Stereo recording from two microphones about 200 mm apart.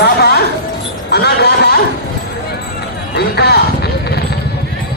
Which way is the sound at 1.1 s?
55° left (ahead or behind).